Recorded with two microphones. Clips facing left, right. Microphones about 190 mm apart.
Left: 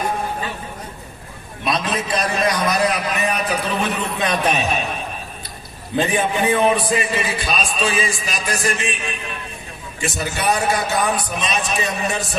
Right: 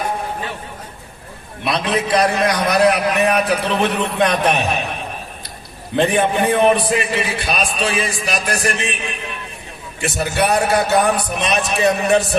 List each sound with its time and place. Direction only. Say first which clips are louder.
1.6 s a man's voice: right 3 dB; 65° right (ahead or behind)
6.0 s a man's voice: right 3 dB; 60° right (ahead or behind)
10.0 s a man's voice: right 5 dB; 60° right (ahead or behind)